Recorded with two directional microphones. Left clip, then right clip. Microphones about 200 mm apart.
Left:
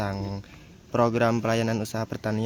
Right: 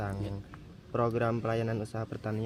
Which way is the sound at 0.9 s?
60° left (ahead or behind).